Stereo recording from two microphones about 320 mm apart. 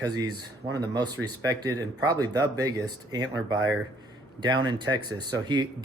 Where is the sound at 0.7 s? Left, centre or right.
Centre.